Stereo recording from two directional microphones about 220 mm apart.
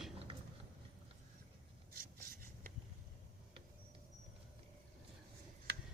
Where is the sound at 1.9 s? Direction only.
40° right (ahead or behind).